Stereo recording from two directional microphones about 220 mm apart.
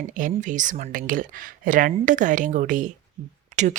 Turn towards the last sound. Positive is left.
turn(degrees=-35)  # may be behind; listen again after turning